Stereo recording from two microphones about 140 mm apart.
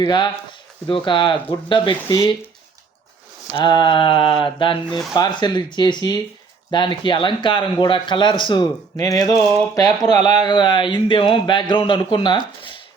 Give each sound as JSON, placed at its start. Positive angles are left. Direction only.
{"t": 0.0, "sound": "speech", "side_deg": 35}
{"t": 3.5, "sound": "speech", "side_deg": 35}